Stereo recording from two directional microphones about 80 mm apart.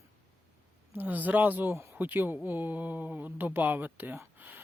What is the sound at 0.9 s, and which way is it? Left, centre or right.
Speech, right.